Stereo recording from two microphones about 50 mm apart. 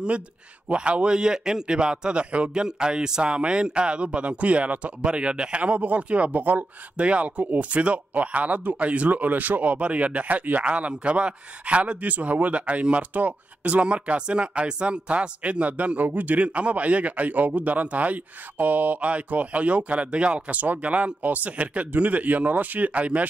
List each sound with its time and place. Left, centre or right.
0.7 s speech: right